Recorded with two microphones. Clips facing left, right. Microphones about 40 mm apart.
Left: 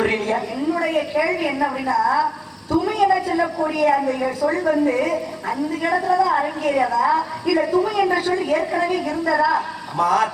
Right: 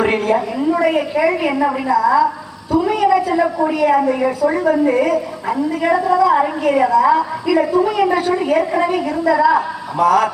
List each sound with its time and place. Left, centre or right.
0.1 s a woman's voice: centre